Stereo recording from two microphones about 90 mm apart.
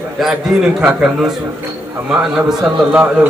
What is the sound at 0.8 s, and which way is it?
A man's voice, 10° right (ahead or behind).